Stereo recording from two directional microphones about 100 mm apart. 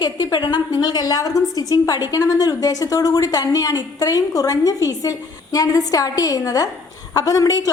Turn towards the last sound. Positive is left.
turn(degrees=35)  # may be behind; listen again after turning